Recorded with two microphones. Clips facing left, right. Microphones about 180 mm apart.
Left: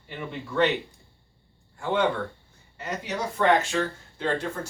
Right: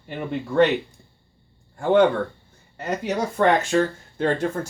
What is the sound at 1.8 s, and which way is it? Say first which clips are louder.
Speech: right 8 dB; 50° right (ahead or behind).